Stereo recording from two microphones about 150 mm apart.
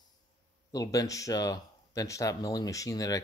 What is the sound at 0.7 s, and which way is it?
Speech, 25° left (ahead or behind).